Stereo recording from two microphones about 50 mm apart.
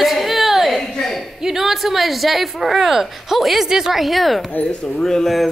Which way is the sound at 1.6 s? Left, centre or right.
Centre.